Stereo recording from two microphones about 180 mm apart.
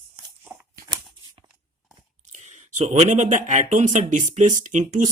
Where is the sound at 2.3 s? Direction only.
40° right (ahead or behind).